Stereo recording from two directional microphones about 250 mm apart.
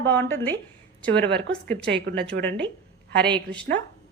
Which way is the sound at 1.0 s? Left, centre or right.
Centre.